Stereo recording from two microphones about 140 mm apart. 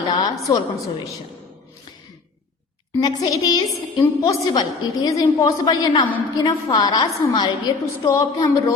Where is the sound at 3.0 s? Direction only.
30° left (ahead or behind).